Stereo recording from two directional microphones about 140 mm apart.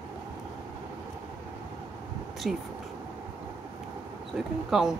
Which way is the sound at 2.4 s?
5° right (ahead or behind).